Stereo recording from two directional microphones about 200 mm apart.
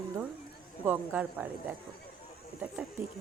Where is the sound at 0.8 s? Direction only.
10° right (ahead or behind).